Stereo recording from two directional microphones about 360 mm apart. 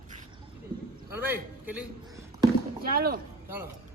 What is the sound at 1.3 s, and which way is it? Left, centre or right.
Speech, centre.